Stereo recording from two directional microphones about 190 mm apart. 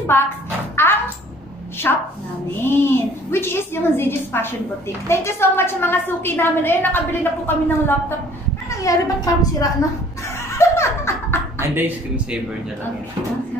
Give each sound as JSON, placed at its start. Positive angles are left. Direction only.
{"t": 1.8, "sound": "a woman's voice", "side_deg": 10}
{"t": 8.6, "sound": "a sound", "side_deg": 15}
{"t": 11.6, "sound": "speech", "side_deg": -10}